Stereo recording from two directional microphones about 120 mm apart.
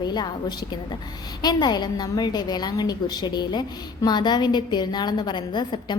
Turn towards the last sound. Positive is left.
turn(degrees=40)  # may be behind; listen again after turning